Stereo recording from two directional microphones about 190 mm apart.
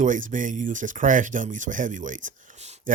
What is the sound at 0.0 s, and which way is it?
Speech, 40° right (ahead or behind).